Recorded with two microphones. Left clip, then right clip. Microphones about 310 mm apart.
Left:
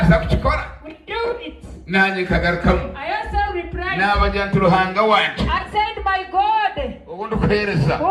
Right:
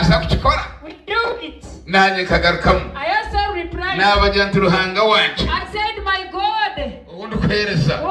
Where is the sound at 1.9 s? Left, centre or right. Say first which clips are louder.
Right 4 dB; centre.